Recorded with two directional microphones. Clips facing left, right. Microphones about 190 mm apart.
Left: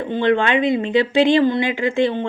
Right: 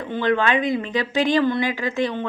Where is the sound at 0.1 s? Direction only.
25° left (ahead or behind).